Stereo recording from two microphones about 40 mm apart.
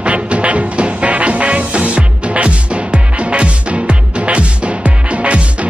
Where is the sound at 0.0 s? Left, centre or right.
Right.